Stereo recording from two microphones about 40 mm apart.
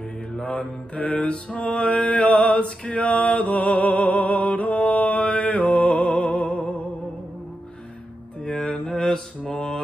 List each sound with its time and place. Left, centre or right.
0.3 s mantra: left
8.5 s mantra: centre